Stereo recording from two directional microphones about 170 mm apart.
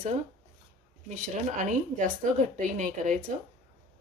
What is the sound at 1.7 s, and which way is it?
A woman's voice, 50° right (ahead or behind).